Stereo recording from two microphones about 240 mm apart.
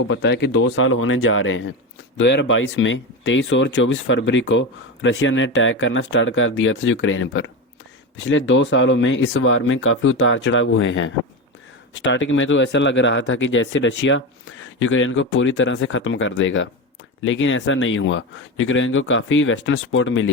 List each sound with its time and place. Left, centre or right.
0.1 s speech: left